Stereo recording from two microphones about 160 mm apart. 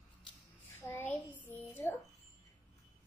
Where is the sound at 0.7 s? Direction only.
15° left (ahead or behind).